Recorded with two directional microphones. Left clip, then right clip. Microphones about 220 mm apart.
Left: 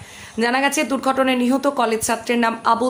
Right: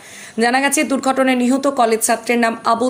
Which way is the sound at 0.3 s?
10° right (ahead or behind).